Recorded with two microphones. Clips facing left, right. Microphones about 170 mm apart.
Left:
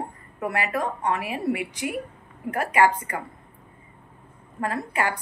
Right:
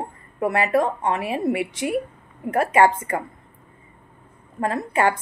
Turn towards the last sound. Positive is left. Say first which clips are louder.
# right 5 dB
turn(degrees=-25)  # may be behind; listen again after turning